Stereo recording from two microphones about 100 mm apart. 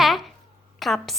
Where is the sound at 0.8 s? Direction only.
Centre (ahead or behind).